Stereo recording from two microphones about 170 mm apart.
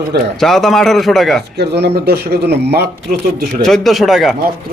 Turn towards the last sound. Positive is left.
turn(degrees=0)  # may be behind; listen again after turning